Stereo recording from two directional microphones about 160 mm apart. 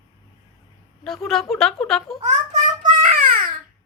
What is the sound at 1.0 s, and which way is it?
Speech, centre (ahead or behind).